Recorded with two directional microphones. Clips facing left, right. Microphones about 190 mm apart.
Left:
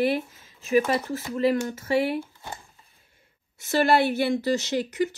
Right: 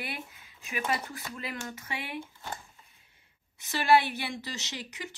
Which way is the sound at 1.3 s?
40° left (ahead or behind).